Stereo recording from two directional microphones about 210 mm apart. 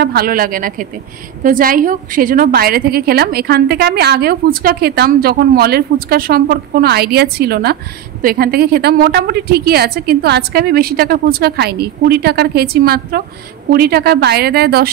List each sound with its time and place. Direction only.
0.0 s a woman's voice: 45° right (ahead or behind)